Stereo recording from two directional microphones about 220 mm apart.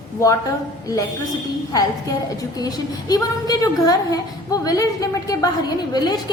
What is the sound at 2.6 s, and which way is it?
A woman's voice, 15° left (ahead or behind).